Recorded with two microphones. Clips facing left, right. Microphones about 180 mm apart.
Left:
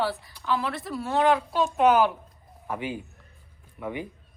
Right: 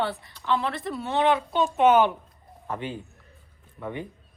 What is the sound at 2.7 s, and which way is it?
Speech, 10° left (ahead or behind).